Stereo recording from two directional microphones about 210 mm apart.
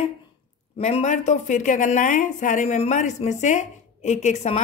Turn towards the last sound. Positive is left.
turn(degrees=30)  # may be behind; listen again after turning